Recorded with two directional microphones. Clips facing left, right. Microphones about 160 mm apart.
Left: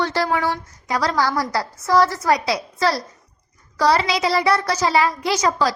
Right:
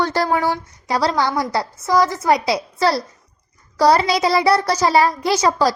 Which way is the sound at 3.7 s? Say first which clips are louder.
Right 3 dB; 40° right (ahead or behind).